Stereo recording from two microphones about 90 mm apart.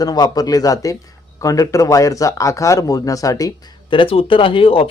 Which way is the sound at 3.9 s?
80° left.